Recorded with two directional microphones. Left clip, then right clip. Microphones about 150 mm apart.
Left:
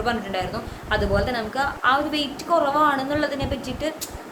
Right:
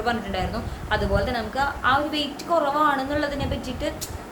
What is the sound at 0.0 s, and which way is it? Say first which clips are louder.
A woman's voice: left 1 dB; 10° left (ahead or behind).